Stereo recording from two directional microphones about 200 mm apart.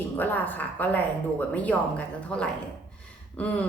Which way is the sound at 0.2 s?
10° left (ahead or behind).